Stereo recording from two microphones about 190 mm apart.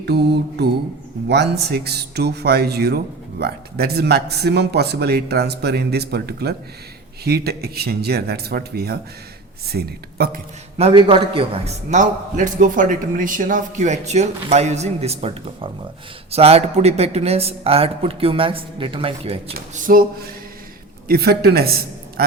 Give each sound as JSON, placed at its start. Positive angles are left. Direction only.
{"t": 0.0, "sound": "a man's voice", "side_deg": -60}
{"t": 10.8, "sound": "a man's voice", "side_deg": -30}
{"t": 19.5, "sound": "a sound", "side_deg": -45}
{"t": 21.1, "sound": "a man's voice", "side_deg": -55}